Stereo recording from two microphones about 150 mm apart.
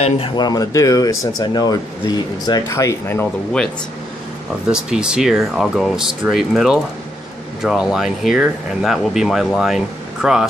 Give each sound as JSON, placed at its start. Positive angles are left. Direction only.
{"t": 0.4, "sound": "speech", "side_deg": 25}
{"t": 4.6, "sound": "speech", "side_deg": -5}